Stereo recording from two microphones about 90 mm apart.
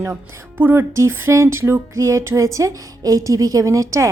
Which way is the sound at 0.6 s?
25° right (ahead or behind).